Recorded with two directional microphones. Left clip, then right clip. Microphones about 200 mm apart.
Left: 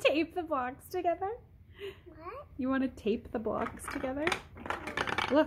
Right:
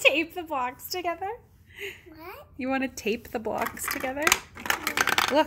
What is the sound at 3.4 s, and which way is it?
Speech, 20° right (ahead or behind).